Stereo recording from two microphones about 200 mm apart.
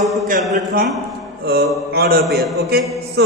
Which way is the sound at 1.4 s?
50° right (ahead or behind).